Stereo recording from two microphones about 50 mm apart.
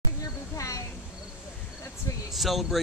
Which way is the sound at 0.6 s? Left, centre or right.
Left.